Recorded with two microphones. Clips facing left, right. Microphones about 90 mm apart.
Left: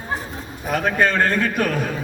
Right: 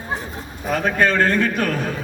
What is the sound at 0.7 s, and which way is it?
A man's voice, 15° left (ahead or behind).